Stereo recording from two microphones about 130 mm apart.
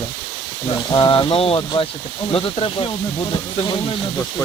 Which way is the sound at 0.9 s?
35° left (ahead or behind).